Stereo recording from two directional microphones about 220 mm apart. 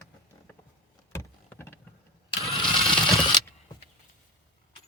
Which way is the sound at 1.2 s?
10° left (ahead or behind).